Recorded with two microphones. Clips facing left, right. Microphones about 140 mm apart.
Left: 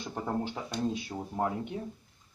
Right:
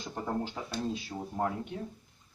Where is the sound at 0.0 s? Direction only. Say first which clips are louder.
Left 1 dB; 15° left (ahead or behind).